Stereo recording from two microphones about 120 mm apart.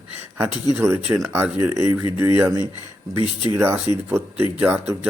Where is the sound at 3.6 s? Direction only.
20° right (ahead or behind).